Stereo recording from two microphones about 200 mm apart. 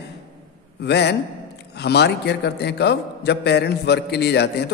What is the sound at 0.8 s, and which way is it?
A man's voice, 55° left (ahead or behind).